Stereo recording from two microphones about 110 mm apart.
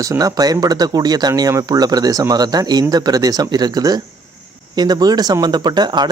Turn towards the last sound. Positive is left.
turn(degrees=-40)  # may be behind; listen again after turning